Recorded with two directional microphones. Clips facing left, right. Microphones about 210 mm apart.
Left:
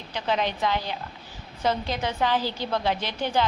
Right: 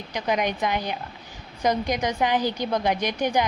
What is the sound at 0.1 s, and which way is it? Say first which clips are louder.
A woman's voice: right 2 dB; 15° right (ahead or behind).